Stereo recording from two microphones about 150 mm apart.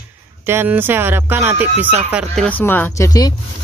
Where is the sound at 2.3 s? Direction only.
10° left (ahead or behind).